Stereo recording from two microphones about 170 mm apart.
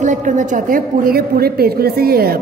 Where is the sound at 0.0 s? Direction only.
45° right (ahead or behind).